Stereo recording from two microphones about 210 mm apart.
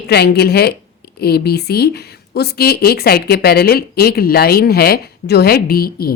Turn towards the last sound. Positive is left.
turn(degrees=45)  # may be behind; listen again after turning